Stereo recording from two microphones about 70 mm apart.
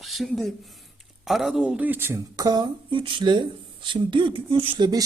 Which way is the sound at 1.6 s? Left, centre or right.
Right.